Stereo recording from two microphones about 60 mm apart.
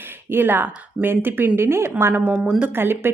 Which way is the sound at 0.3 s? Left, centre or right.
Right.